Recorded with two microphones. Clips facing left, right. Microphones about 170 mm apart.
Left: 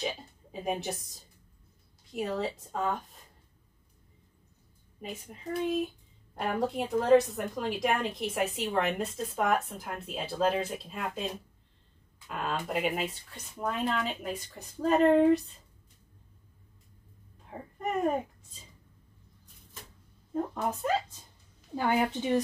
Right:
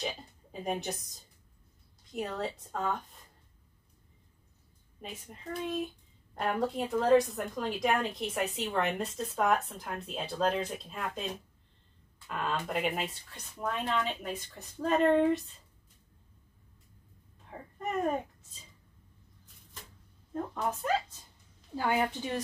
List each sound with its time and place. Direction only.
0.0 s a woman's voice: centre (ahead or behind)
2.1 s a woman's voice: 5° left (ahead or behind)
5.0 s a woman's voice: centre (ahead or behind)
12.3 s a woman's voice: 5° left (ahead or behind)
21.7 s a woman's voice: 15° left (ahead or behind)